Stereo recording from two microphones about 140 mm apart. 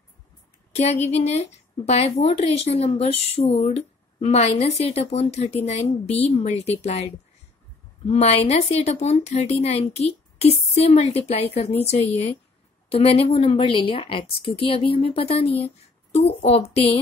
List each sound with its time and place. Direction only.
0.7 s a woman's voice: 50° left (ahead or behind)
8.1 s a woman's voice: 45° left (ahead or behind)